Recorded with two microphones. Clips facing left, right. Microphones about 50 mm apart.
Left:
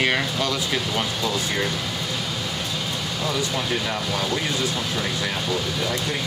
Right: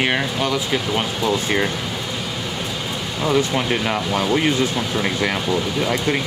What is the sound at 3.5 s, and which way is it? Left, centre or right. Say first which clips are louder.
Speech: right 5 dB; right.